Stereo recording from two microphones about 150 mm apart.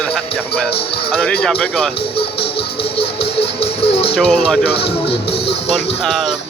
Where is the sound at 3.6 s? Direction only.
40° left (ahead or behind).